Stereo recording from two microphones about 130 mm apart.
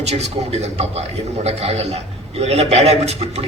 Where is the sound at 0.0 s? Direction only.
55° right (ahead or behind).